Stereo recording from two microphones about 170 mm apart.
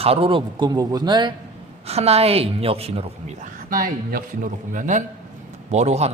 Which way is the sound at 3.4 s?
55° right (ahead or behind).